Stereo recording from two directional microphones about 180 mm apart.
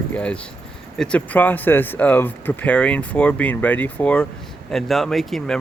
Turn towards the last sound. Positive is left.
turn(degrees=0)  # may be behind; listen again after turning